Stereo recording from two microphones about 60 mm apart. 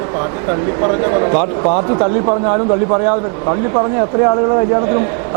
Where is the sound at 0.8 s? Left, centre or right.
Right.